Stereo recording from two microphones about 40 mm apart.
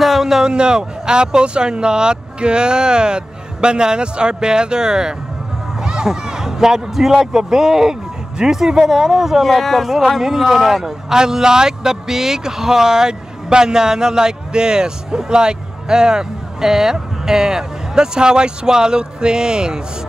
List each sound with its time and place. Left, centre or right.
0.0 s speech: centre
5.8 s a sound: centre
7.3 s speech: centre